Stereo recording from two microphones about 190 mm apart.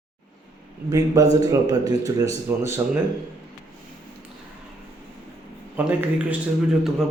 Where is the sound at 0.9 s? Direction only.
15° right (ahead or behind).